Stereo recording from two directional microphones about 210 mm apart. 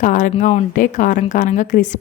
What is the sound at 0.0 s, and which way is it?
A woman's voice, 35° left (ahead or behind).